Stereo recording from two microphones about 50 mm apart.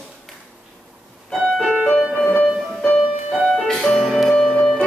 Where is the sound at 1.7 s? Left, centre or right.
Right.